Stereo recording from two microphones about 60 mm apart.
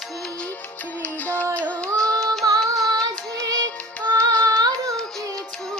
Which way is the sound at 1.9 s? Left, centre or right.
Right.